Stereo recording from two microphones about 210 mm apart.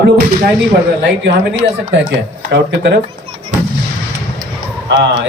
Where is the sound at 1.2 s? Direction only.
55° right (ahead or behind).